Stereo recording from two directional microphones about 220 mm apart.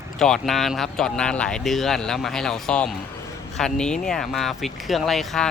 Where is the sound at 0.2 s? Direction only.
Centre (ahead or behind).